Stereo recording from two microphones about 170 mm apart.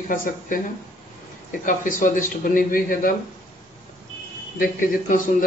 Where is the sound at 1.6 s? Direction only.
50° left (ahead or behind).